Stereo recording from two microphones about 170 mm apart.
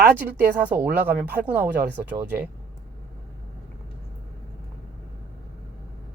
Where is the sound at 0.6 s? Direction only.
10° right (ahead or behind).